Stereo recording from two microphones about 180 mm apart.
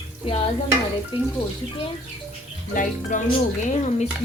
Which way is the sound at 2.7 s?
45° left (ahead or behind).